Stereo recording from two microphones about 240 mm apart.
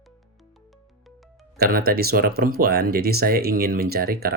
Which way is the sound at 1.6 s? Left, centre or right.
Right.